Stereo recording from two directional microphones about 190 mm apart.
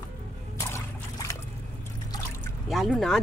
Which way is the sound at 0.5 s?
15° left (ahead or behind).